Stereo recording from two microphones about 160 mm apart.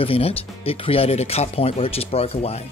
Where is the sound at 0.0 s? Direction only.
35° left (ahead or behind).